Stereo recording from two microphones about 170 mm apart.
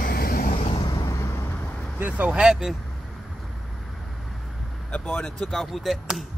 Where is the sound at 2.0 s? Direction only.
10° right (ahead or behind).